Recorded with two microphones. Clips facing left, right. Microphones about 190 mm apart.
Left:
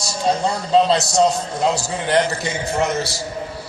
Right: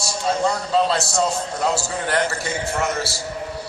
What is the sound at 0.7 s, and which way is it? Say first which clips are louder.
A man's voice: left 4 dB; 20° left (ahead or behind).